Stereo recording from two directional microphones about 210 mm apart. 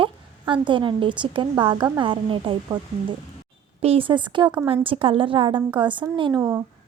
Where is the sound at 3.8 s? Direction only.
25° right (ahead or behind).